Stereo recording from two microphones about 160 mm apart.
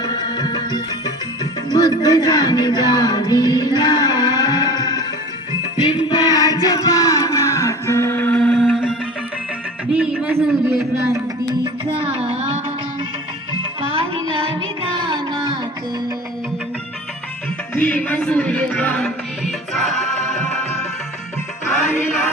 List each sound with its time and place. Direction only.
0.0 s music: 25° left (ahead or behind)
1.7 s speech: 25° left (ahead or behind)
6.0 s music: 25° left (ahead or behind); by 9.0 s centre (ahead or behind)
9.9 s a sound: 10° right (ahead or behind)
11.6 s music: 35° right (ahead or behind)
13.9 s music: 35° right (ahead or behind)
17.7 s music: 10° left (ahead or behind)
21.8 s music: 15° left (ahead or behind)